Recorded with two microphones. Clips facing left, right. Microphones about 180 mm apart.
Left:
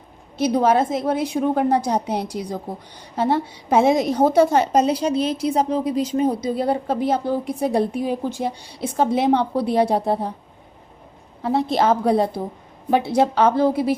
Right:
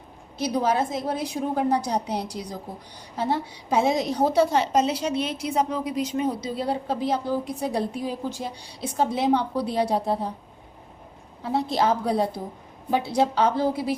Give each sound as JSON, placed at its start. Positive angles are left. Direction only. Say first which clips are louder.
{"t": 0.3, "sound": "a woman's voice", "louder": "left 6 dB", "side_deg": 55}
{"t": 6.6, "sound": "a woman's voice", "louder": "left 5 dB", "side_deg": 55}
{"t": 11.4, "sound": "a woman's voice", "louder": "left 4 dB", "side_deg": 60}